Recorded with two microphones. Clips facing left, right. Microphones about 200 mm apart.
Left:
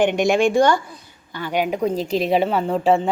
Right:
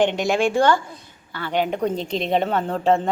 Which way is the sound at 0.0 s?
15° left (ahead or behind).